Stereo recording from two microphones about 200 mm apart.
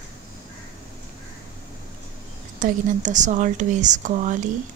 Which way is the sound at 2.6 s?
40° right (ahead or behind).